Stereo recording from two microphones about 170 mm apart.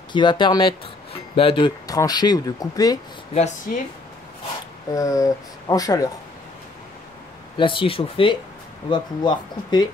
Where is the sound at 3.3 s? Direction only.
45° left (ahead or behind).